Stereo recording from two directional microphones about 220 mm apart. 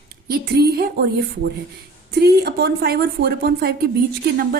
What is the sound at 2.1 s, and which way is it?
A woman's voice, 45° right (ahead or behind).